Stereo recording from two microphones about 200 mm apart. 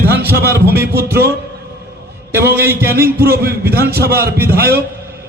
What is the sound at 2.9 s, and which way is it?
Speech, 50° right (ahead or behind).